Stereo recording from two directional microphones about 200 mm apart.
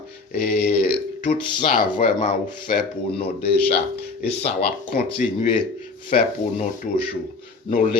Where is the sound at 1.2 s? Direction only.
40° left (ahead or behind).